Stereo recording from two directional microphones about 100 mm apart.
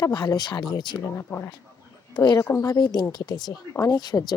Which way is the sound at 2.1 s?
45° left (ahead or behind).